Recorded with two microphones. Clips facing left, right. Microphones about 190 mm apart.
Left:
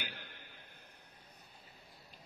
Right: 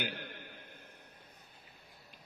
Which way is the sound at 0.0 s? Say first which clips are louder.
Right 9 dB; 55° right (ahead or behind).